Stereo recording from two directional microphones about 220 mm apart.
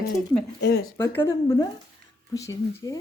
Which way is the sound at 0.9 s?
10° left (ahead or behind).